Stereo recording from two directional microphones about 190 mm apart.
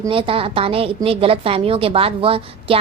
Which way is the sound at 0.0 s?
30° right (ahead or behind).